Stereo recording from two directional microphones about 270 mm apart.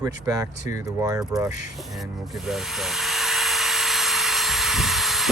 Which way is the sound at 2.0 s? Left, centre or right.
Centre.